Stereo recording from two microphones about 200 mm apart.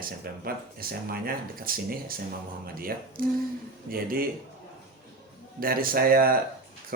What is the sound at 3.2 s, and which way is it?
Speech, 45° right (ahead or behind).